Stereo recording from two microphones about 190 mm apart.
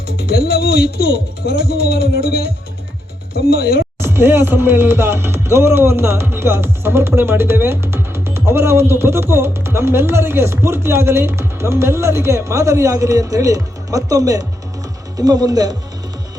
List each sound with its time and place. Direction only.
0.2 s speech: 55° left (ahead or behind)
3.3 s speech: 50° left (ahead or behind)
4.0 s music: 10° right (ahead or behind)
15.2 s speech: 20° right (ahead or behind)